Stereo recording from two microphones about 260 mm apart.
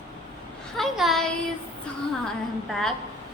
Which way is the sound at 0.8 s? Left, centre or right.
Centre.